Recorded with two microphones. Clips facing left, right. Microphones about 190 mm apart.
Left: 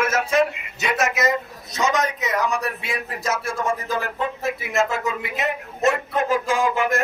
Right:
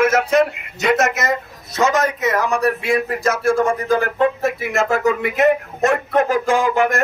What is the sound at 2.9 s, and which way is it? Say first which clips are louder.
Speech: right 8 dB; 60° right (ahead or behind).